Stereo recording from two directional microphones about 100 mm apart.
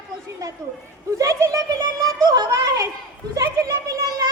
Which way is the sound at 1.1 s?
35° right (ahead or behind).